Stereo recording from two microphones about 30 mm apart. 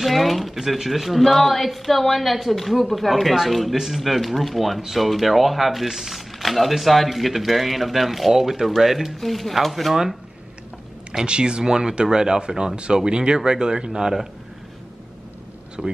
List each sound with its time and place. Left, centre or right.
0.0 s a sound: centre
0.8 s a woman's voice: centre
6.4 s a woman's voice: centre
9.2 s a woman's voice: centre
11.2 s speech: right
15.8 s speech: right